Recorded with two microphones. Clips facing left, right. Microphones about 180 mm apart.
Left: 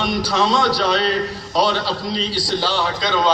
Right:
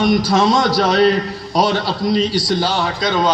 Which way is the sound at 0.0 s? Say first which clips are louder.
Right 5 dB; 45° right (ahead or behind).